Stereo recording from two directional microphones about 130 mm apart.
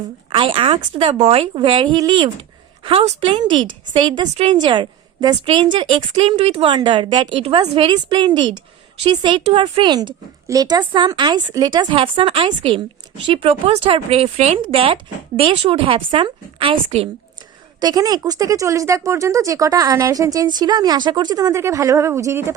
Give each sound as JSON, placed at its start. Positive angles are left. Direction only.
{"t": 0.3, "sound": "a woman's voice", "side_deg": -40}
{"t": 2.8, "sound": "speech", "side_deg": -50}
{"t": 4.4, "sound": "a woman's voice", "side_deg": -55}
{"t": 4.6, "sound": "speech", "side_deg": -35}
{"t": 6.1, "sound": "a woman's voice", "side_deg": -50}
{"t": 14.6, "sound": "a woman's voice", "side_deg": -45}
{"t": 17.7, "sound": "speech", "side_deg": -30}